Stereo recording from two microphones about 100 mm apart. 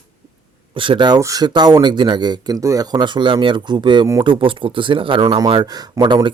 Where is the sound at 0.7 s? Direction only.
55° right (ahead or behind).